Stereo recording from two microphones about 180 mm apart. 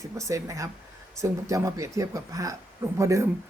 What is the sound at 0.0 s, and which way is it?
Speech, 15° right (ahead or behind).